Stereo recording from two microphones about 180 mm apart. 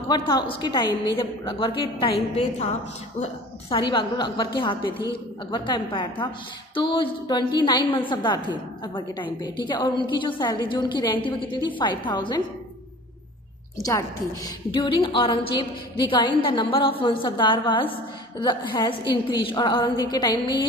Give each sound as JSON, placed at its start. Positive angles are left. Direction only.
{"t": 0.1, "sound": "a woman's voice", "side_deg": 25}
{"t": 3.7, "sound": "a woman's voice", "side_deg": 25}
{"t": 14.7, "sound": "a woman's voice", "side_deg": 25}